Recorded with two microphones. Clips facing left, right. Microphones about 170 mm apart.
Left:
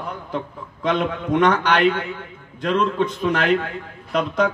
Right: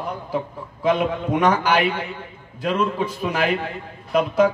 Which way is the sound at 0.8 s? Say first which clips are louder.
Right 2 dB; 10° right (ahead or behind).